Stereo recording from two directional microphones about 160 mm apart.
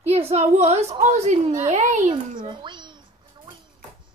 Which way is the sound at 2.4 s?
30° right (ahead or behind).